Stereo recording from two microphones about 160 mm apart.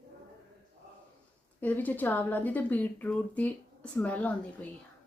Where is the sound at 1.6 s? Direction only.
10° left (ahead or behind).